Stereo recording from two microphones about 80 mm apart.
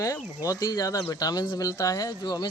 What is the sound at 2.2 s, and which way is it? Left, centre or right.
Speech, left.